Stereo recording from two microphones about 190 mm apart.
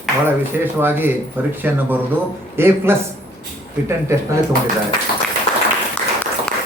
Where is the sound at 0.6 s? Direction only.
10° right (ahead or behind).